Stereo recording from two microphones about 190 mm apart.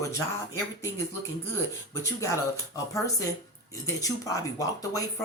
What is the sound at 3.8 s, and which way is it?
Speech, 20° left (ahead or behind).